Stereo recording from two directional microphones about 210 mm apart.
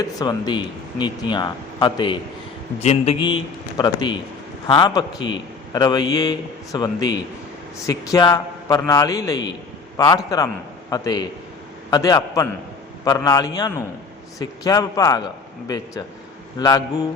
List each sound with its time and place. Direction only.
0.0 s a man's voice: 20° left (ahead or behind)